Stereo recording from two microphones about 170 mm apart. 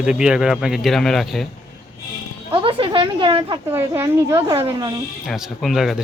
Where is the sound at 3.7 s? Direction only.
15° right (ahead or behind).